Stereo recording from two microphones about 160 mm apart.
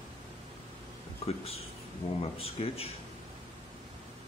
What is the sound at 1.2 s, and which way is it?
Speech, 40° left (ahead or behind).